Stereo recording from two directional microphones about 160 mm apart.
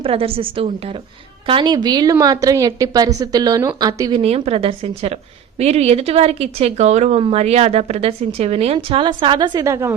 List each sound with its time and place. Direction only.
0.0 s a woman's voice: 35° right (ahead or behind)
4.2 s speech: 40° right (ahead or behind); by 9.9 s 20° right (ahead or behind)